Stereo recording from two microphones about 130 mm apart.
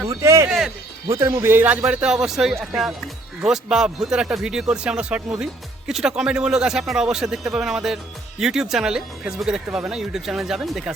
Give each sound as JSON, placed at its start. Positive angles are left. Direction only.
{"t": 0.0, "sound": "a sound", "side_deg": -20}
{"t": 0.4, "sound": "music", "side_deg": -5}
{"t": 1.0, "sound": "speech", "side_deg": -25}